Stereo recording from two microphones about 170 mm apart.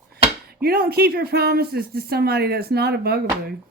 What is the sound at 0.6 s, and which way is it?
Speech, 65° right (ahead or behind).